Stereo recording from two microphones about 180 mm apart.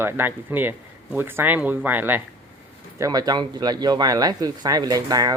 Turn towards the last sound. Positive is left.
turn(degrees=-20)  # may be behind; listen again after turning